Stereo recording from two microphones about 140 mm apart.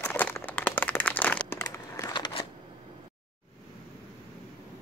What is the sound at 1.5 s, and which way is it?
Crumpling, 20° left (ahead or behind).